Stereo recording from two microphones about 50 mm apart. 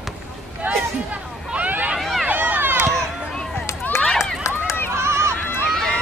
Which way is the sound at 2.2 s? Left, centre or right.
Right.